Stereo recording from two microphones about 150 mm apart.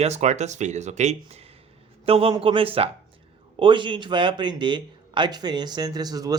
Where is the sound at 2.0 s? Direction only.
40° right (ahead or behind).